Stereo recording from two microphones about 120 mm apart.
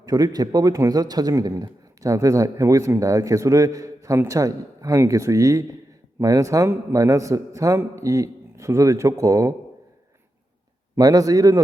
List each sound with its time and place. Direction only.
0.0 s a man's voice: 30° right (ahead or behind)
10.9 s a man's voice: 30° right (ahead or behind)